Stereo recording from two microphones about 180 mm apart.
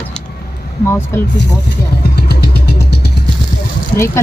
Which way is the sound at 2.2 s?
60° left (ahead or behind).